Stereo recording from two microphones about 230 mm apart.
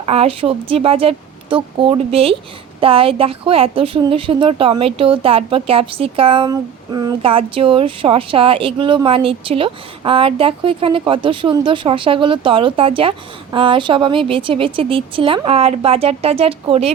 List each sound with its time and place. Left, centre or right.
0.1 s a woman's voice: right